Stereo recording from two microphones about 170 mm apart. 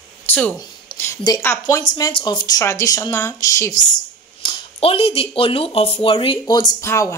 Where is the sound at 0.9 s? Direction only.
25° left (ahead or behind).